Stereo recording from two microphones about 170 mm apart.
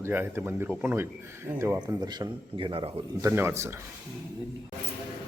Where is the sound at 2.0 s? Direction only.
25° right (ahead or behind).